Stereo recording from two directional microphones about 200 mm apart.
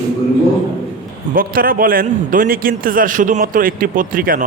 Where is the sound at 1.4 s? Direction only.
45° right (ahead or behind).